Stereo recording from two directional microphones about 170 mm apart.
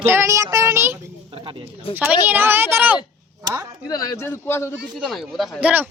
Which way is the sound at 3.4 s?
20° right (ahead or behind).